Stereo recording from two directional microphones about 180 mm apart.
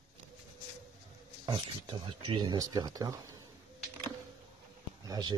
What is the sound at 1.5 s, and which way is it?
Speech, 25° right (ahead or behind).